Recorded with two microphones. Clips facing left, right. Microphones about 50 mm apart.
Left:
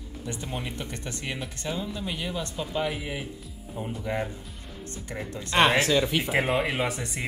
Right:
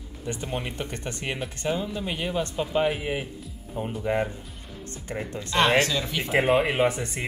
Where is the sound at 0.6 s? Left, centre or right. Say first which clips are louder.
Right 3 dB; right.